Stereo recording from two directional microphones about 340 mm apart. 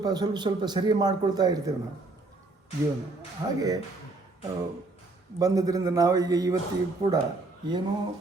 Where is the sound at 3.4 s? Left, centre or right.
Centre.